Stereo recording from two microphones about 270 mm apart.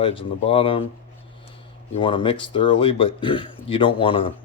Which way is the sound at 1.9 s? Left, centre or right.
Centre.